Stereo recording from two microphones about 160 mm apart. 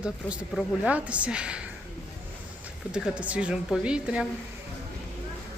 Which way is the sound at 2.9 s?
5° right (ahead or behind).